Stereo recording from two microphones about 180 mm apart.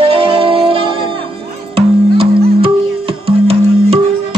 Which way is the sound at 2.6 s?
30° right (ahead or behind).